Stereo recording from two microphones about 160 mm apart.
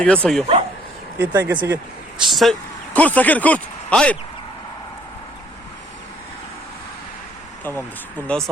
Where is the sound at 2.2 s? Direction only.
Centre (ahead or behind).